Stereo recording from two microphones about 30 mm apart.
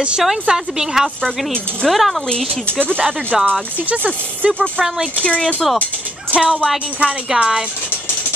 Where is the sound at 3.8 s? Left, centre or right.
Right.